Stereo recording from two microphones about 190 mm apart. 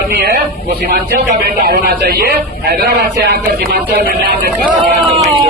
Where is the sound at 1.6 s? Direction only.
55° right (ahead or behind).